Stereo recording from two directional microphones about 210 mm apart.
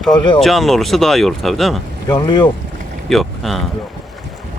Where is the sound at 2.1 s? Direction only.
20° left (ahead or behind).